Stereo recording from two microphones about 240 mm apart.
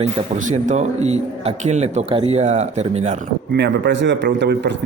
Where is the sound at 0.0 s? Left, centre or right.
Right.